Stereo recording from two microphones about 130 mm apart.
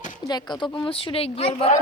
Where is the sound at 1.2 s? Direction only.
50° left (ahead or behind).